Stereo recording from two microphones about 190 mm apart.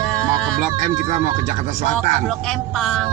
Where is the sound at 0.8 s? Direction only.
40° right (ahead or behind).